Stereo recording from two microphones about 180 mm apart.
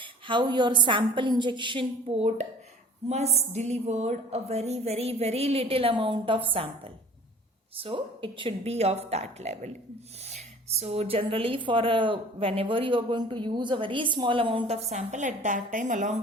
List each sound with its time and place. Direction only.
0.0 s a woman's voice: 25° right (ahead or behind); by 16.1 s 45° right (ahead or behind)